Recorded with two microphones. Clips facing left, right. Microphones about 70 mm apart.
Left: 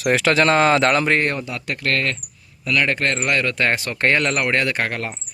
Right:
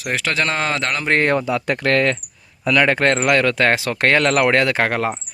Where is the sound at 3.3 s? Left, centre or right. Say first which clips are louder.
Right 2 dB; right.